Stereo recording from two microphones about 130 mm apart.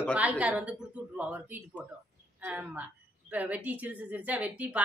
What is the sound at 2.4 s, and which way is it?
A woman's voice, 10° right (ahead or behind).